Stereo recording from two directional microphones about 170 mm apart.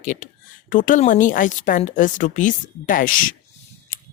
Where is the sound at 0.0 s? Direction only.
50° left (ahead or behind).